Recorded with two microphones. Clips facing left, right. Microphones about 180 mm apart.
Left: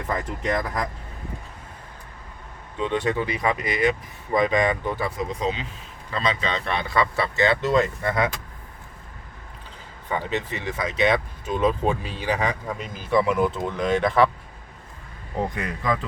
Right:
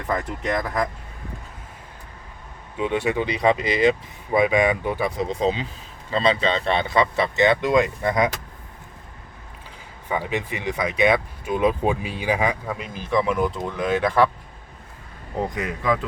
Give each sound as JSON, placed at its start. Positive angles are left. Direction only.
{"t": 0.1, "sound": "speech", "side_deg": 0}
{"t": 2.7, "sound": "speech", "side_deg": -10}
{"t": 3.2, "sound": "speech", "side_deg": -20}
{"t": 4.3, "sound": "speech", "side_deg": -10}
{"t": 5.1, "sound": "speech", "side_deg": -25}
{"t": 10.1, "sound": "speech", "side_deg": -10}
{"t": 15.4, "sound": "speech", "side_deg": 0}